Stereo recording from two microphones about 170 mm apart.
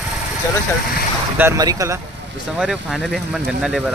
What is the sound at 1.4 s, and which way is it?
Speech, 20° right (ahead or behind).